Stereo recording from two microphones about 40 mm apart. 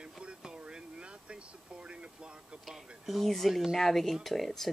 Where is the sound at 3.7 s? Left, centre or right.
Centre.